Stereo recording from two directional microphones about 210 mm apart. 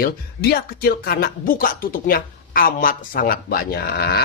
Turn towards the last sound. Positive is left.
turn(degrees=50)  # may be behind; listen again after turning